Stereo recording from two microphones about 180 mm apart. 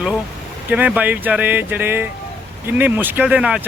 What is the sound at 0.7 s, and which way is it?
A man's voice, 10° right (ahead or behind).